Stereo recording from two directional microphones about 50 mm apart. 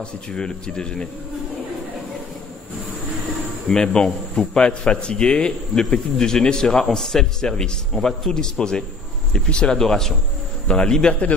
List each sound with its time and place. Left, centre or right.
0.0 s a man's voice: centre
3.6 s a man's voice: centre